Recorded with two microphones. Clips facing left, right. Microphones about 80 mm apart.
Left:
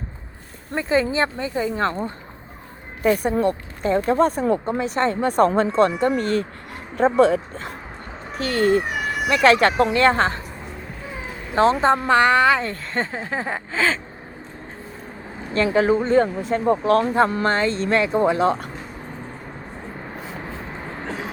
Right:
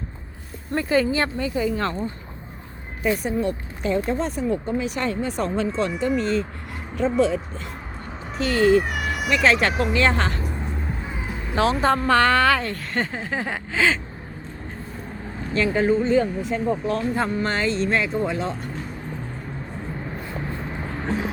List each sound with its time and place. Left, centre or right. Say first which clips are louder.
0.7 s speech: even; left
3.0 s speech: left 4 dB; left
4.8 s speech: left 4 dB; left
5.2 s speech: left 7 dB; left
9.4 s speech: left 5 dB; left
11.5 s speech: left 3 dB; left
12.6 s speech: left 1 dB; left
15.7 s speech: left 2 dB; left
16.0 s speech: left 2 dB; left
16.6 s speech: left 8 dB; left